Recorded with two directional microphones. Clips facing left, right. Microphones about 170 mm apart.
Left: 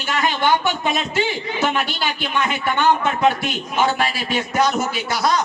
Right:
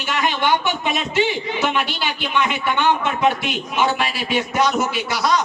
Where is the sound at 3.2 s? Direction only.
45° left (ahead or behind).